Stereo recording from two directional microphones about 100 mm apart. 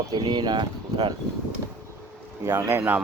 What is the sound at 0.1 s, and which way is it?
Speech, 50° right (ahead or behind).